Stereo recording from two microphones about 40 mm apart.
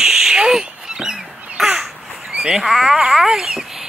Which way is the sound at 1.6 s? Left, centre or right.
Centre.